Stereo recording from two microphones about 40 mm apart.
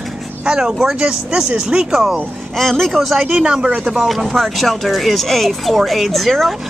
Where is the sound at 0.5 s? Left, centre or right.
Centre.